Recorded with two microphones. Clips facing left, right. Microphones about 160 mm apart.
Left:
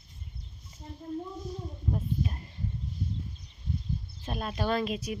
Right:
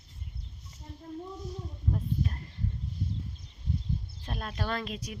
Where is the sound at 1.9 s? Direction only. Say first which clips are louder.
Left 1 dB; 15° left (ahead or behind).